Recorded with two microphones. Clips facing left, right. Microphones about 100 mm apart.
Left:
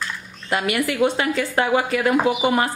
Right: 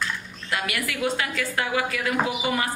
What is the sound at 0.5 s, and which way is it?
A woman's voice, 30° left (ahead or behind).